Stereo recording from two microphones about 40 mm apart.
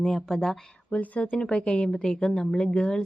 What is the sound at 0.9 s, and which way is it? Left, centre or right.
Speech, left.